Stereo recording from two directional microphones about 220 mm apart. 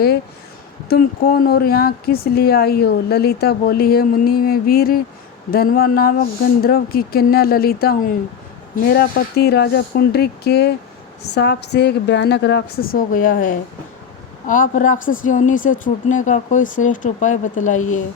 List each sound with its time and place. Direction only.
0.9 s a woman's voice: 40° left (ahead or behind)